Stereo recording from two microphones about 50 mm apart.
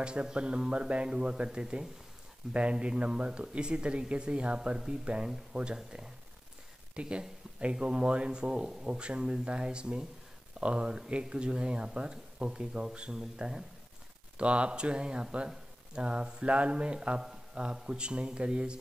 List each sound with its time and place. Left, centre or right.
0.0 s speech: centre
14.3 s speech: right